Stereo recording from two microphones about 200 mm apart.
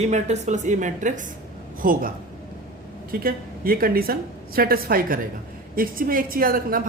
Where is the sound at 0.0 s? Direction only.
35° right (ahead or behind).